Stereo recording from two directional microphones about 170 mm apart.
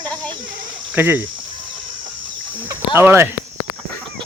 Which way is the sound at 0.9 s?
10° right (ahead or behind).